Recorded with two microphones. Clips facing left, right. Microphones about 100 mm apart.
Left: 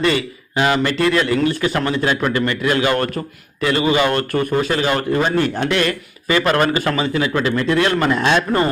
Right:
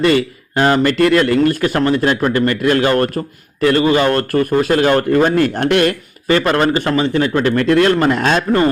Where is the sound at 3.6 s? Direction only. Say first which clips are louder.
Right 4 dB; 45° right (ahead or behind).